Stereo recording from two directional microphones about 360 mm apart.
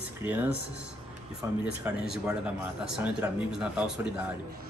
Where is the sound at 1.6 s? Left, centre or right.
Centre.